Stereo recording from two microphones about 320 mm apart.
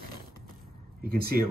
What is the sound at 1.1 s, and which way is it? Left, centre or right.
Speech, right.